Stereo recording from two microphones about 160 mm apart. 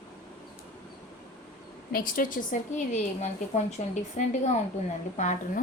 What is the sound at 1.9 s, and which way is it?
A woman's voice, 60° left (ahead or behind).